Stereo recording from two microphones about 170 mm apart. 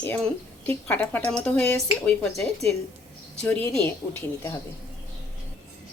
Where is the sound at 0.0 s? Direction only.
10° left (ahead or behind).